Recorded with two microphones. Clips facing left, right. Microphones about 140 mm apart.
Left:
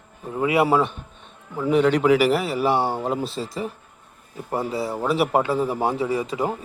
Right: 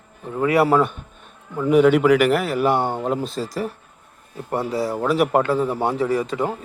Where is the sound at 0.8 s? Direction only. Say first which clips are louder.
Right 3 dB; centre (ahead or behind).